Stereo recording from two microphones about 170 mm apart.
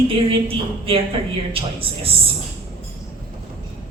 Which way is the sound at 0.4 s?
35° right (ahead or behind).